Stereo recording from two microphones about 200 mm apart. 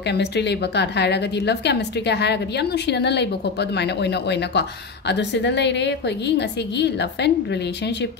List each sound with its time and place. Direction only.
0.0 s a woman's voice: 60° left (ahead or behind)